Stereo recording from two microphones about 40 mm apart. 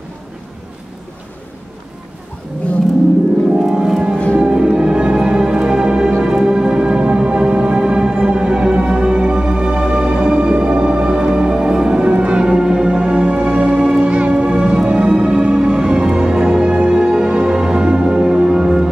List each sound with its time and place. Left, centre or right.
3.5 s music: centre